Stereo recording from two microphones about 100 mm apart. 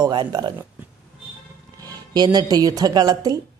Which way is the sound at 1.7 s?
40° right (ahead or behind).